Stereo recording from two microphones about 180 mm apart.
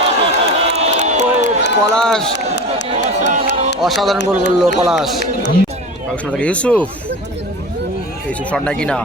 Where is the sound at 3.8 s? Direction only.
Centre (ahead or behind).